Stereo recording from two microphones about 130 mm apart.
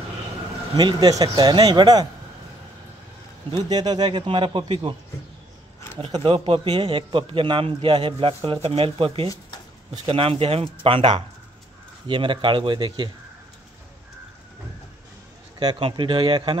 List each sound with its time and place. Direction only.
0.7 s speech: 35° right (ahead or behind)
3.6 s speech: 30° right (ahead or behind)
5.9 s speech: 45° right (ahead or behind)
15.6 s speech: 35° right (ahead or behind)